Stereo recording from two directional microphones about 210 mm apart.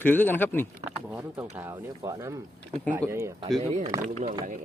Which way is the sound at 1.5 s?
15° right (ahead or behind).